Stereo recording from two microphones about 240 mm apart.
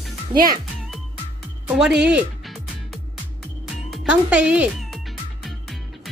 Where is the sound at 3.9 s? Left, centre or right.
Centre.